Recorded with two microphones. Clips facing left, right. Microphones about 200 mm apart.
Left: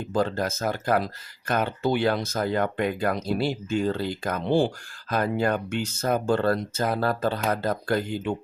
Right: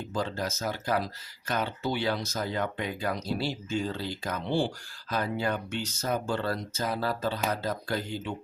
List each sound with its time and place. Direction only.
0.1 s speech: 55° left (ahead or behind)